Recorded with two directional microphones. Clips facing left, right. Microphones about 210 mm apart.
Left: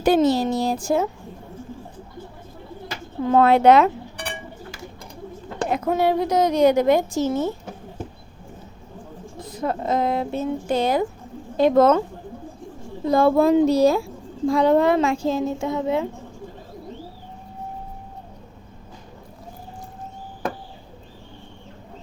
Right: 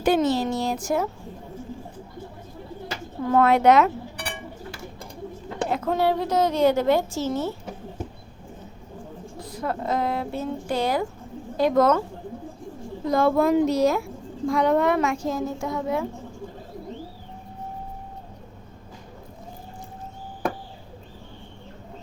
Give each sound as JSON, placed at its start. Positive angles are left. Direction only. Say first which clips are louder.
{"t": 0.0, "sound": "speech", "louder": "left 3 dB", "side_deg": 35}
{"t": 3.2, "sound": "a woman's voice", "louder": "left 3 dB", "side_deg": 30}
{"t": 5.6, "sound": "a woman's voice", "louder": "left 2 dB", "side_deg": 15}
{"t": 9.4, "sound": "a woman's voice", "louder": "left 3 dB", "side_deg": 20}
{"t": 13.1, "sound": "a woman's voice", "louder": "left 3 dB", "side_deg": 30}